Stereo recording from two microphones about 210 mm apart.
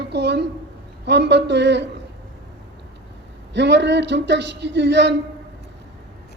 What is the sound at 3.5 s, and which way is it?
Speech, 55° right (ahead or behind).